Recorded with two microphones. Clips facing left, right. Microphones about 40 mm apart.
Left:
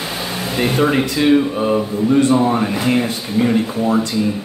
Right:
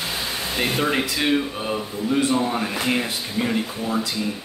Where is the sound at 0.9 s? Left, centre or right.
Centre.